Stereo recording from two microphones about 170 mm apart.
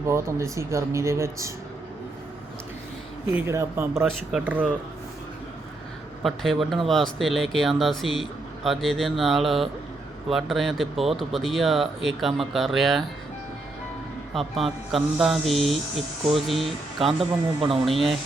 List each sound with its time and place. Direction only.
0.1 s speech: 15° right (ahead or behind)
3.2 s speech: 15° right (ahead or behind)
4.0 s speech: 5° right (ahead or behind)
6.2 s speech: centre (ahead or behind)
14.3 s speech: centre (ahead or behind)